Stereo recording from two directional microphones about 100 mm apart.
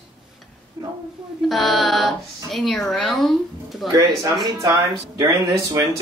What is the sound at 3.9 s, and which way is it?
Speech, 35° right (ahead or behind).